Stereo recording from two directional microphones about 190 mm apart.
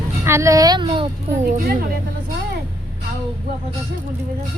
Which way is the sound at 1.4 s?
50° right (ahead or behind).